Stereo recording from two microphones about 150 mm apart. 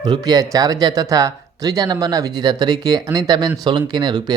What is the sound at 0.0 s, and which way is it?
Speech, 25° right (ahead or behind).